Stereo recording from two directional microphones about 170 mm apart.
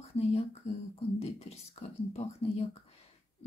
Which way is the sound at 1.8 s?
35° left (ahead or behind).